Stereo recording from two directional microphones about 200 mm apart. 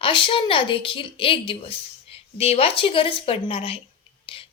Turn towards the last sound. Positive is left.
turn(degrees=25)  # may be behind; listen again after turning